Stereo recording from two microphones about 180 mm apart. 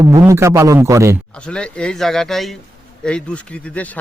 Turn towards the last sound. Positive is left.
turn(degrees=10)  # may be behind; listen again after turning